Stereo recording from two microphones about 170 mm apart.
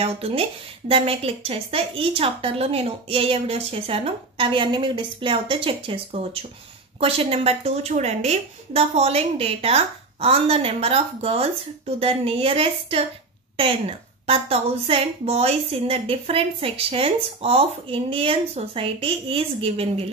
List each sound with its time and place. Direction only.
0.0 s a woman's voice: 35° right (ahead or behind)